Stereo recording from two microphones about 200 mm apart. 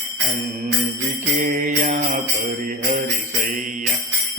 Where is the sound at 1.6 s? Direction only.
40° right (ahead or behind).